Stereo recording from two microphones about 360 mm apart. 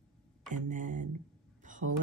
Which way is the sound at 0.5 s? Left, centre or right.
Right.